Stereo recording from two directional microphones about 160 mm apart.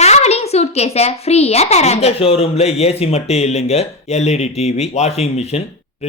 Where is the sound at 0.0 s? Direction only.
45° left (ahead or behind).